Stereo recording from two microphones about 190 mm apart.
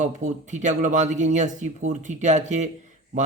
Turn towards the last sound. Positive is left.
turn(degrees=-40)  # may be behind; listen again after turning